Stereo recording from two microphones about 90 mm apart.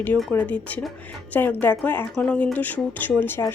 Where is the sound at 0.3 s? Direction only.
15° left (ahead or behind).